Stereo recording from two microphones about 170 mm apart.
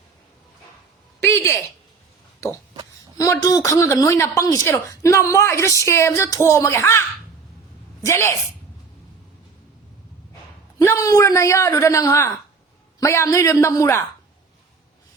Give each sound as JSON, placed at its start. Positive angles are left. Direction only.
{"t": 1.2, "sound": "a sound", "side_deg": 15}
{"t": 3.2, "sound": "speech", "side_deg": 20}
{"t": 8.0, "sound": "speech", "side_deg": 15}
{"t": 10.8, "sound": "a man's voice", "side_deg": 20}